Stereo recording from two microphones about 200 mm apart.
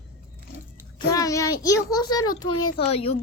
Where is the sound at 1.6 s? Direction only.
20° left (ahead or behind).